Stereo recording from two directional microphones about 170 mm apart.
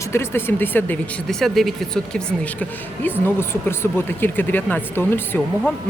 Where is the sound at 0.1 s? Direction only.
15° left (ahead or behind).